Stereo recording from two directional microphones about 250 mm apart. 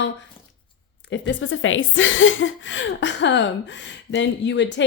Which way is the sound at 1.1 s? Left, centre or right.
Left.